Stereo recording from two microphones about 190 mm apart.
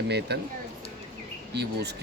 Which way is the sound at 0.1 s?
60° right (ahead or behind).